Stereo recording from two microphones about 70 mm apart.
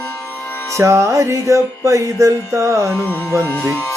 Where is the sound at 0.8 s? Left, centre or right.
Right.